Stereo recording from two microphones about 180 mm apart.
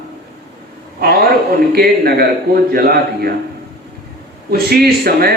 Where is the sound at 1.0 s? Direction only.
60° right (ahead or behind).